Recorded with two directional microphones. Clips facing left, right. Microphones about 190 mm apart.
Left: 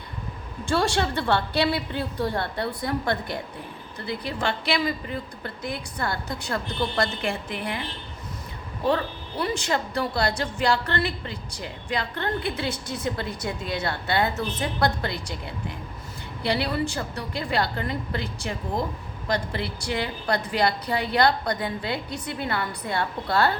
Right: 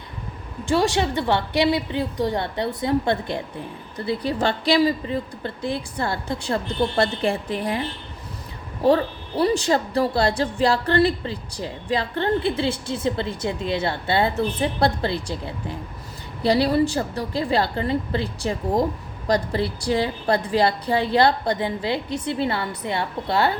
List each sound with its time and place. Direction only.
0.6 s a woman's voice: 15° right (ahead or behind); by 7.8 s 35° right (ahead or behind)
8.8 s a child's voice: 35° right (ahead or behind)